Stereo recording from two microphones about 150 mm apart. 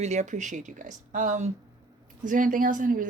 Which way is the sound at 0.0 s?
50° right (ahead or behind).